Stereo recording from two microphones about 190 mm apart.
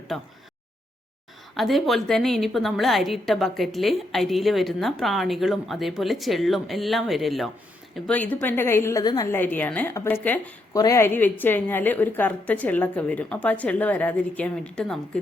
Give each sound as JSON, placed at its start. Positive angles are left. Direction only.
{"t": 1.5, "sound": "a woman's voice", "side_deg": 0}